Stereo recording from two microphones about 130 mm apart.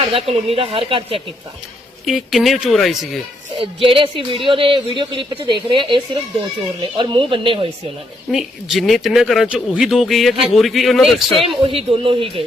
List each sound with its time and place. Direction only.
0.0 s speech: 45° right (ahead or behind)
2.0 s speech: centre (ahead or behind)
3.5 s speech: 45° right (ahead or behind)
8.3 s speech: centre (ahead or behind)
11.6 s speech: 45° right (ahead or behind)